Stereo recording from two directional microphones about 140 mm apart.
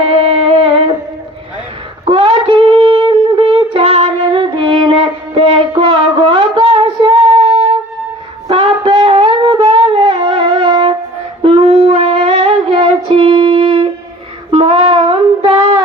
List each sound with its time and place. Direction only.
0.0 s music: 45° right (ahead or behind)
2.0 s shofar: 40° right (ahead or behind)
8.4 s a sound: 40° right (ahead or behind)
11.4 s wind instrument: 40° right (ahead or behind)
14.5 s music: 40° right (ahead or behind)